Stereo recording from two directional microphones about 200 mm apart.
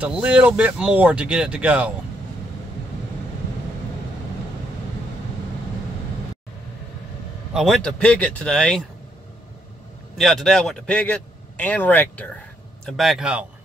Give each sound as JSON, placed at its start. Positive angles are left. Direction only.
{"t": 0.0, "sound": "a man's voice", "side_deg": -5}
{"t": 7.5, "sound": "a man's voice", "side_deg": 0}
{"t": 10.1, "sound": "a man's voice", "side_deg": 0}